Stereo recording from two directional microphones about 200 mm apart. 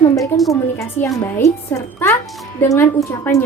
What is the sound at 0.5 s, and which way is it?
A woman's voice, 15° left (ahead or behind).